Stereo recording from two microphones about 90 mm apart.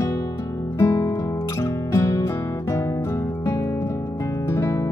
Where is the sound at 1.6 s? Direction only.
30° left (ahead or behind).